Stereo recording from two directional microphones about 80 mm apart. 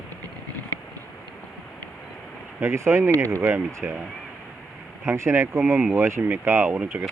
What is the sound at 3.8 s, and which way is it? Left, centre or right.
Speech, centre.